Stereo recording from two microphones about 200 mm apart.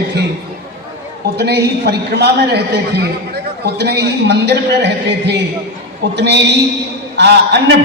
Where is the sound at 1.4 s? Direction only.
55° right (ahead or behind).